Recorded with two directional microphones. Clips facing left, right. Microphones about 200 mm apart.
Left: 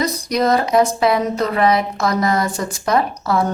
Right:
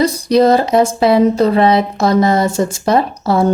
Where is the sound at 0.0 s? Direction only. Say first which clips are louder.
Right 7 dB; 30° right (ahead or behind).